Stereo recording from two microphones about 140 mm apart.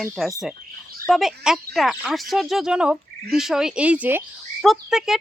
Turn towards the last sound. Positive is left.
turn(degrees=-5)  # may be behind; listen again after turning